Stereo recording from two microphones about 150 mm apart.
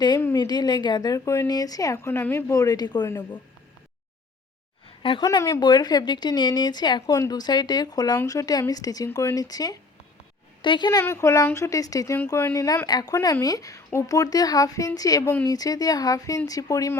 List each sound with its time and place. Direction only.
0.3 s speech: 30° left (ahead or behind)
5.2 s speech: 25° left (ahead or behind)
11.0 s speech: 15° left (ahead or behind)